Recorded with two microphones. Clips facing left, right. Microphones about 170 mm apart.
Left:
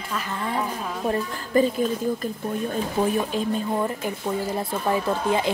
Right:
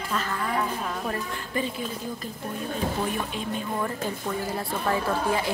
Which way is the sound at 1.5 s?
40° left (ahead or behind).